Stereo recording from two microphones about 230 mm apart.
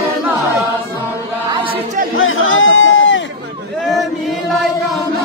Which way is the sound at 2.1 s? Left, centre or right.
Left.